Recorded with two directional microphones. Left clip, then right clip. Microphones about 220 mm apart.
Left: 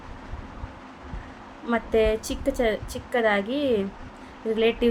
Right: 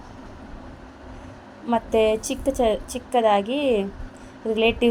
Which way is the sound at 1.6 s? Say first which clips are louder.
Right 2 dB; centre (ahead or behind).